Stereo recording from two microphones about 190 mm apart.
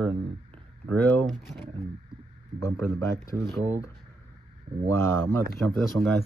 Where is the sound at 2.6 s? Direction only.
15° left (ahead or behind).